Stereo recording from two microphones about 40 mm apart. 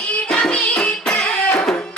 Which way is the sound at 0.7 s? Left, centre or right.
Left.